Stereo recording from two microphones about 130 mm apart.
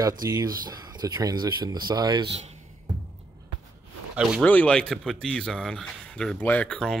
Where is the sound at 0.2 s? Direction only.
30° right (ahead or behind).